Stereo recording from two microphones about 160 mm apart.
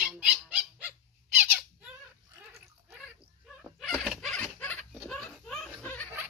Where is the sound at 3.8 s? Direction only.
Centre (ahead or behind).